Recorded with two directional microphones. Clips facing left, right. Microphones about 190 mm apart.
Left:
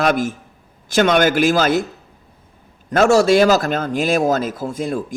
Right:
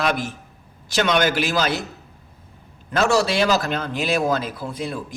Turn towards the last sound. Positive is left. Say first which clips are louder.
# left 6 dB
turn(degrees=45)  # may be behind; listen again after turning